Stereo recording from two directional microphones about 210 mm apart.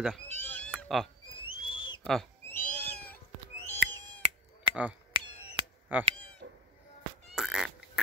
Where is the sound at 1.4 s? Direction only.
25° left (ahead or behind).